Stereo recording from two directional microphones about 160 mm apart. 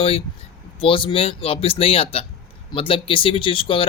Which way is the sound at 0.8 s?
35° left (ahead or behind).